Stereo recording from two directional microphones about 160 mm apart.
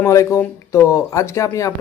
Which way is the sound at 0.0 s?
15° left (ahead or behind).